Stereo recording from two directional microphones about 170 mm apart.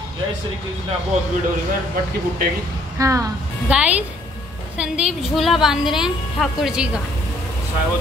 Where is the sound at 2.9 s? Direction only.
20° right (ahead or behind).